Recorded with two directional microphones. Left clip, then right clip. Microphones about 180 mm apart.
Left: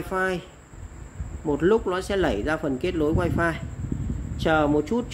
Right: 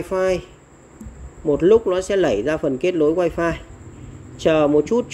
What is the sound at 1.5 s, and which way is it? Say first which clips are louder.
Speech: right 7 dB; centre (ahead or behind).